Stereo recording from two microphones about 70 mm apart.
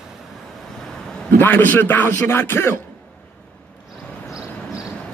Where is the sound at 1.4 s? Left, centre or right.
Left.